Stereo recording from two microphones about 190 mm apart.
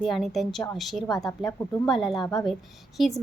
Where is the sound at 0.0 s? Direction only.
Centre (ahead or behind).